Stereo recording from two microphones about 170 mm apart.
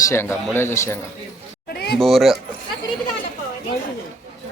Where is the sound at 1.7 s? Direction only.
70° left (ahead or behind).